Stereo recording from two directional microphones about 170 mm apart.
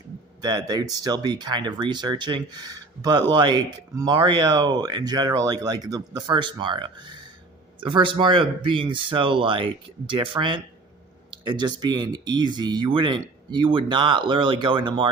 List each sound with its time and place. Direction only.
0.4 s speech: 25° right (ahead or behind)